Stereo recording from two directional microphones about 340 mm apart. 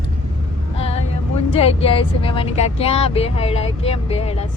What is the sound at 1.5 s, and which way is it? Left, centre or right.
Speech, centre.